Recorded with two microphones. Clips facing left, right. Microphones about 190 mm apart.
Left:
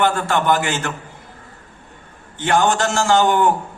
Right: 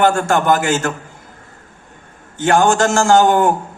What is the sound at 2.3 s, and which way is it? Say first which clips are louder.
A man's voice: right 4 dB; 45° right (ahead or behind).